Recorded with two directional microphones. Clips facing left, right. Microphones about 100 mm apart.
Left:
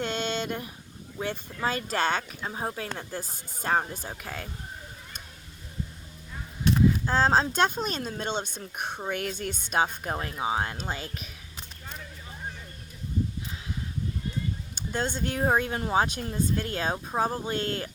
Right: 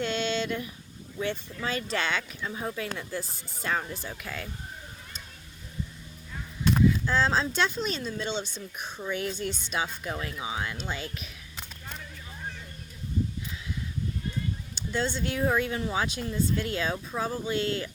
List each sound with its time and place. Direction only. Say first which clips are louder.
0.0 s a sound: right 1 dB; 50° left (ahead or behind)
1.3 s speech: left 4 dB; 45° left (ahead or behind)
6.9 s speech: left 3 dB; 45° left (ahead or behind)
14.8 s speech: even; 50° left (ahead or behind)